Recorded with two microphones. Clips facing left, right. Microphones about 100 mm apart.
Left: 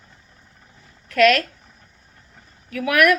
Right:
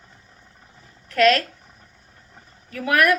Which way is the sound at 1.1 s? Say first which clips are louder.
Left 1 dB; 30° right (ahead or behind).